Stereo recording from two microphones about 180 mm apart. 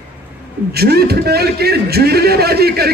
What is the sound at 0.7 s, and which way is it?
A man's voice, 60° right (ahead or behind).